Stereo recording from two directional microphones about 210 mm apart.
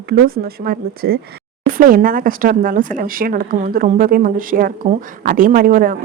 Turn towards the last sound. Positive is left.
turn(degrees=-40)  # may be behind; listen again after turning